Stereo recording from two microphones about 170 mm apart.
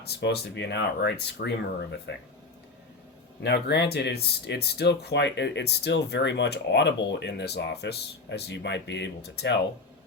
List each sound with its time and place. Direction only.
0.0 s speech: 75° left (ahead or behind)
3.4 s speech: 80° left